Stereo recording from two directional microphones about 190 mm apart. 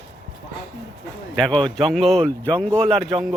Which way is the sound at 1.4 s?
5° left (ahead or behind).